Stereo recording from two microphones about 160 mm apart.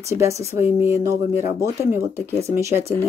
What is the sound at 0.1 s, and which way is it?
Speech, 15° right (ahead or behind).